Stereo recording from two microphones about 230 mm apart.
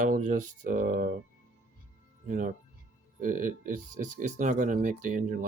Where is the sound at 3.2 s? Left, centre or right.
Right.